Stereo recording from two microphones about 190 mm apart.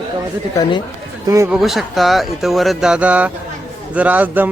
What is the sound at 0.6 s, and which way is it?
Speech, 25° left (ahead or behind).